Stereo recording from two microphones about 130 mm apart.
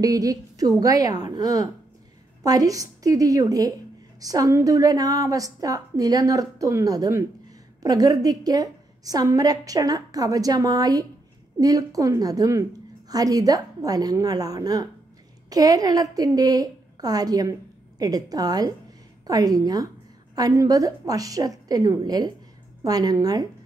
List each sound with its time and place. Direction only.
0.0 s a woman's voice: 25° right (ahead or behind)